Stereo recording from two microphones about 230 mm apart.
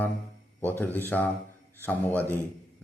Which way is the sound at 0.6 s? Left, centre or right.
Centre.